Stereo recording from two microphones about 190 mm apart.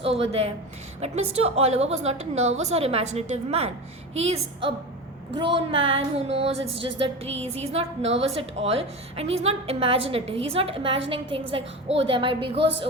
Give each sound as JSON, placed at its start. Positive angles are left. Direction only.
{"t": 0.0, "sound": "music", "side_deg": -30}
{"t": 11.1, "sound": "a woman's voice", "side_deg": -30}